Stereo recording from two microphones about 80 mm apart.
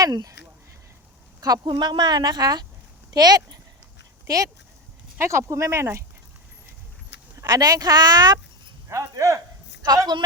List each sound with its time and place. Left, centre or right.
0.0 s speech: right
1.4 s speech: right
1.6 s speech: right
5.2 s speech: right
7.3 s speech: right
8.9 s speech: right
9.8 s speech: right